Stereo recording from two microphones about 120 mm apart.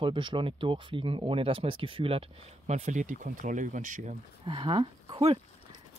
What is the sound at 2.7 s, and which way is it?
Speech, 75° right (ahead or behind).